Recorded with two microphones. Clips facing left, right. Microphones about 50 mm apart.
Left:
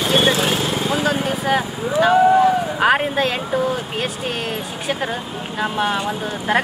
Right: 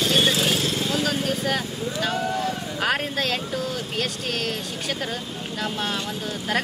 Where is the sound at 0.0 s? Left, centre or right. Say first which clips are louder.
Left 4 dB; left.